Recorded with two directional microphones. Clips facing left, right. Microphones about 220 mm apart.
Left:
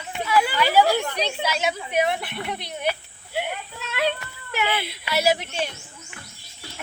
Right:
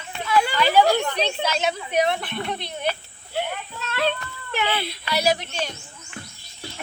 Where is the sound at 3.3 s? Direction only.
10° left (ahead or behind).